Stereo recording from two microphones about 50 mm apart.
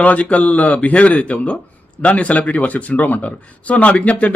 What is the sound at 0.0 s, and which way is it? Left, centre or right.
Speech, left.